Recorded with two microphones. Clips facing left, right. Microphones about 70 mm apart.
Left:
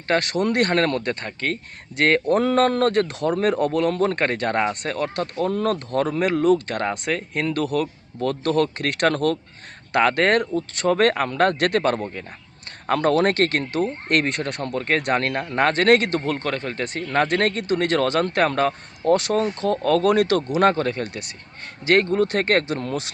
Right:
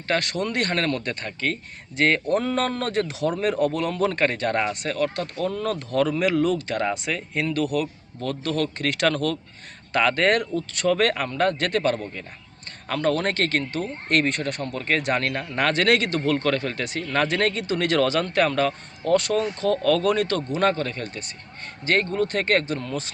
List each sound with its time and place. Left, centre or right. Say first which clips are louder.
0.1 s speech: left 4 dB; left
2.3 s speech: left 4 dB; left
2.6 s speech: left 6 dB; left
11.3 s speech: left 3 dB; left
13.1 s speech: left 5 dB; left
16.1 s a man's voice: right 1 dB; left
16.7 s speech: left 3 dB; left
20.1 s speech: left 5 dB; left
20.6 s speech: left 3 dB; left